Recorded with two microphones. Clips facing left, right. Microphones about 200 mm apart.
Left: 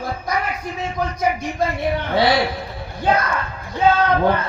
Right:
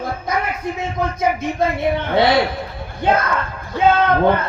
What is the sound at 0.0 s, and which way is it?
Speech, 25° right (ahead or behind).